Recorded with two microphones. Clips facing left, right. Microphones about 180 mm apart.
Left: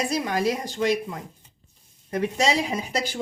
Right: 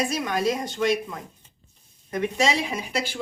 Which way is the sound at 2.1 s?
35° left (ahead or behind).